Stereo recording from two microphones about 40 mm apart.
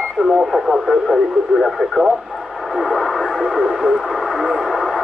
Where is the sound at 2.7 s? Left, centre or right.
Centre.